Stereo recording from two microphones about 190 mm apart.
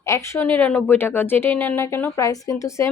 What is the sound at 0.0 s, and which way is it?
Speech, 15° left (ahead or behind).